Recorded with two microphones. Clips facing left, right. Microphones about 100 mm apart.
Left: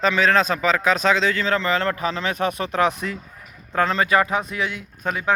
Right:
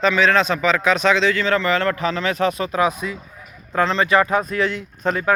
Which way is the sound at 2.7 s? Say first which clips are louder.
Right 1 dB; 65° left (ahead or behind).